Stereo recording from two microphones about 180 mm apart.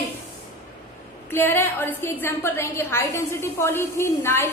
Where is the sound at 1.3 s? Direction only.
15° left (ahead or behind).